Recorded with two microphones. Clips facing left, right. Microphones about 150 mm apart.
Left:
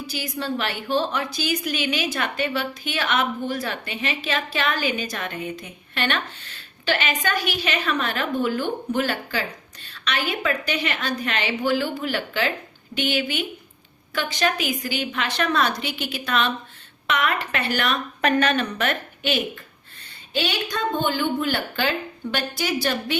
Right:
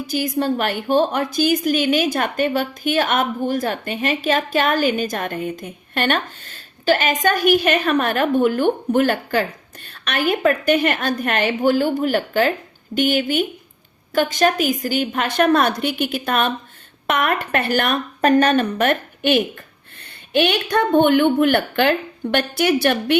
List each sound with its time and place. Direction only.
0.1 s a woman's voice: 50° right (ahead or behind)
20.3 s a woman's voice: 60° right (ahead or behind)